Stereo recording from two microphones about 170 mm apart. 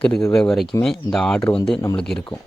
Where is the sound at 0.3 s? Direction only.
Centre (ahead or behind).